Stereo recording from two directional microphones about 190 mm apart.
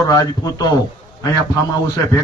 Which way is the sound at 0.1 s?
20° left (ahead or behind).